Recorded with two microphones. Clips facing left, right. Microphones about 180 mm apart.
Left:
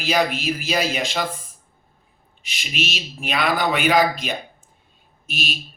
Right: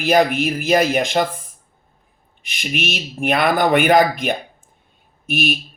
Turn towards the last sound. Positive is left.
turn(degrees=-55)  # may be behind; listen again after turning